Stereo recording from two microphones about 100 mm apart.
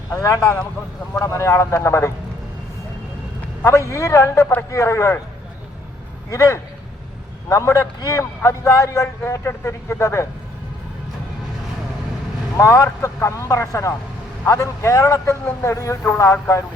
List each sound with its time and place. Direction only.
0.1 s a man's voice: 35° left (ahead or behind)
3.6 s a man's voice: 30° left (ahead or behind)
6.3 s a man's voice: 30° left (ahead or behind)
12.5 s a man's voice: 30° left (ahead or behind)